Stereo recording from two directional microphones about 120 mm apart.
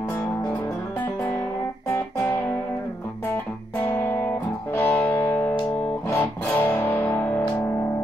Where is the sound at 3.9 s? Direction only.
15° left (ahead or behind).